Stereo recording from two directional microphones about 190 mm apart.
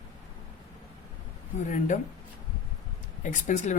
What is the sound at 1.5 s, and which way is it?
Speech, 40° left (ahead or behind).